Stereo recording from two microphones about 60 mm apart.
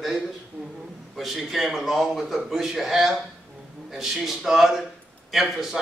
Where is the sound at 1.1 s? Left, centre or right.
Centre.